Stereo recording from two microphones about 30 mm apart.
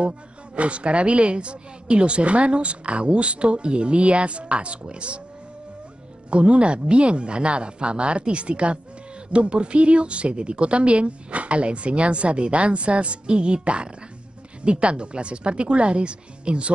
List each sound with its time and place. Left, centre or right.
0.6 s a woman's voice: right
6.3 s a woman's voice: right